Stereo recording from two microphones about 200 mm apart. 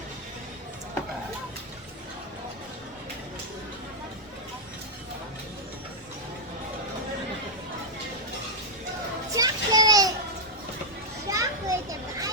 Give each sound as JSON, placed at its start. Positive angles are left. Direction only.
{"t": 9.3, "sound": "children playing", "side_deg": -20}
{"t": 11.3, "sound": "children playing", "side_deg": -15}